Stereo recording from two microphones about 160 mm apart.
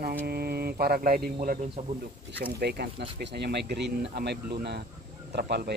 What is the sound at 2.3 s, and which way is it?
Speech, 85° right.